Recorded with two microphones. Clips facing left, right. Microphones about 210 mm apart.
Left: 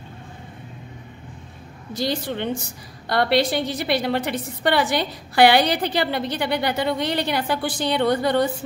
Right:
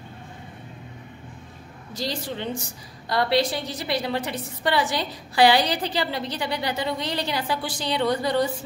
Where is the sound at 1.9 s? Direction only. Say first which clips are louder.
Left 5 dB; 60° left (ahead or behind).